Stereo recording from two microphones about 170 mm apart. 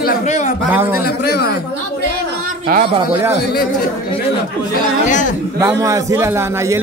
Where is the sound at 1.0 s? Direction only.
65° left (ahead or behind).